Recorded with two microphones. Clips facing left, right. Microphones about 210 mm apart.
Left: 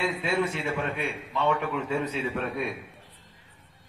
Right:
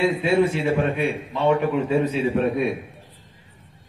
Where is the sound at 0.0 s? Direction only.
30° right (ahead or behind).